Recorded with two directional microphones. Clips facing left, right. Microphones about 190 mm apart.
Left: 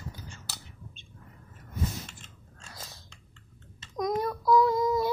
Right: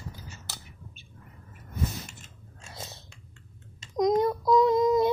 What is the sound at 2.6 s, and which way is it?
Chewing, 25° right (ahead or behind).